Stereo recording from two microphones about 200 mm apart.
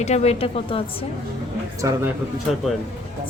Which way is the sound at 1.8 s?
15° right (ahead or behind).